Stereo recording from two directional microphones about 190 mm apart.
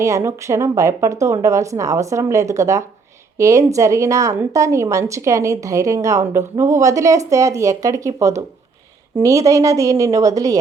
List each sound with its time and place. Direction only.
0.0 s a woman's voice: 15° right (ahead or behind)